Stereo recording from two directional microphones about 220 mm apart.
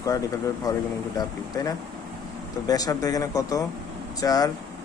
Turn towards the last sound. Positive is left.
turn(degrees=15)  # may be behind; listen again after turning